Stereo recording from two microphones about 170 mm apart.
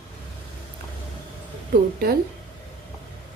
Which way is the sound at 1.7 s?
65° right (ahead or behind).